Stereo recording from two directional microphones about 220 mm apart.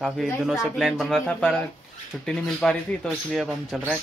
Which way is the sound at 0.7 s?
Centre (ahead or behind).